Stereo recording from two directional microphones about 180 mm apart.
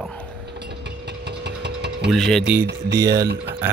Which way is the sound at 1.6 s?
70° right (ahead or behind).